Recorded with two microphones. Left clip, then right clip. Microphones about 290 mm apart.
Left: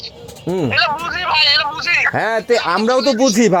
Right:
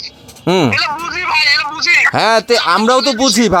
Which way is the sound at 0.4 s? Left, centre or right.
Centre.